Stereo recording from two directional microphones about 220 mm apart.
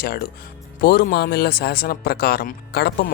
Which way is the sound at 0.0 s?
45° left (ahead or behind).